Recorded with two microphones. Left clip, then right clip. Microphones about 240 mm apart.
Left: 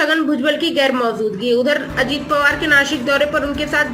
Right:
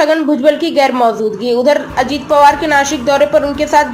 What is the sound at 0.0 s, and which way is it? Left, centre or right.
A woman's voice, right.